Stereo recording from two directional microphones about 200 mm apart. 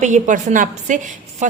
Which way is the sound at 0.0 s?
35° right (ahead or behind).